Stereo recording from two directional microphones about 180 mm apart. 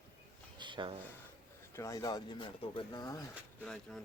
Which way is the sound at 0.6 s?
25° right (ahead or behind).